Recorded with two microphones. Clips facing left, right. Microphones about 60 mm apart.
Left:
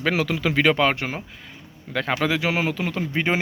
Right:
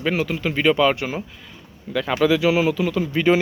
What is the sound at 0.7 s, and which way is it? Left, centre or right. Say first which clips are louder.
Speech: right 3 dB; left.